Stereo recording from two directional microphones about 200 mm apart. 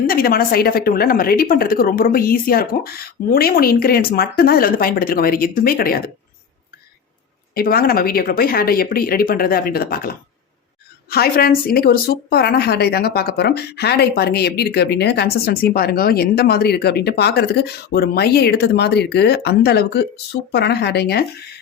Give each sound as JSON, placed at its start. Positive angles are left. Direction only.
{"t": 0.1, "sound": "a woman's voice", "side_deg": 50}
{"t": 7.5, "sound": "a woman's voice", "side_deg": 50}